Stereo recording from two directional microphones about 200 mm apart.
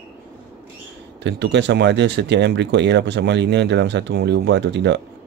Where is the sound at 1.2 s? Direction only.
60° right (ahead or behind).